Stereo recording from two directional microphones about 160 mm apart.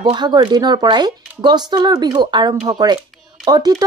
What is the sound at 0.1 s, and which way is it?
Speech, 30° right (ahead or behind).